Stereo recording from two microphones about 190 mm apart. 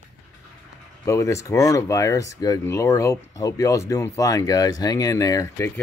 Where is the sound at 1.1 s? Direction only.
15° left (ahead or behind).